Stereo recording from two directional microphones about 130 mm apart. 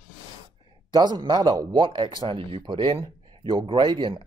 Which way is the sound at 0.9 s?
35° right (ahead or behind).